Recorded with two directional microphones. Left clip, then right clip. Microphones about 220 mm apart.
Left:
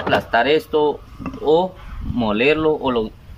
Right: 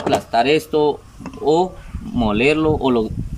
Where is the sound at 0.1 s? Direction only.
15° right (ahead or behind).